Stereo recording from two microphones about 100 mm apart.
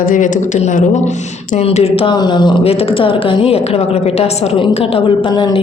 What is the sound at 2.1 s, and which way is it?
Speech, 45° left (ahead or behind).